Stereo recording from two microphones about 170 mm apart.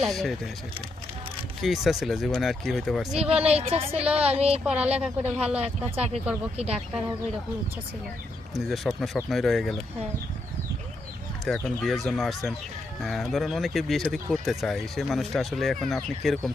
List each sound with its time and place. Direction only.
0.0 s speech: centre (ahead or behind)
1.6 s speech: centre (ahead or behind)
3.2 s speech: 35° right (ahead or behind)
4.6 s speech: 5° right (ahead or behind)
8.5 s speech: centre (ahead or behind)
11.4 s speech: centre (ahead or behind)